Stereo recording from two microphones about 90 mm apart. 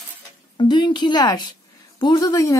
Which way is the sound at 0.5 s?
55° left (ahead or behind).